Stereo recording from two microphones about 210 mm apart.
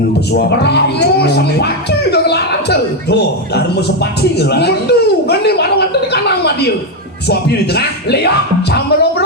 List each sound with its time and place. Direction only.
0.6 s speech: 50° left (ahead or behind)
7.3 s speech: 50° left (ahead or behind)